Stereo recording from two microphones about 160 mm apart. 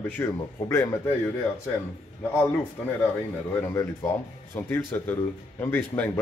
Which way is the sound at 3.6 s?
15° left (ahead or behind).